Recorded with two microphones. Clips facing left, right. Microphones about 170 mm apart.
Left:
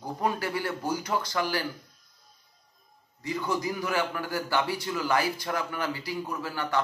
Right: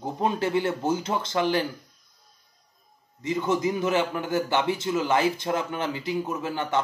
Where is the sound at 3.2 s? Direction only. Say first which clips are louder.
Right 5 dB; 20° right (ahead or behind).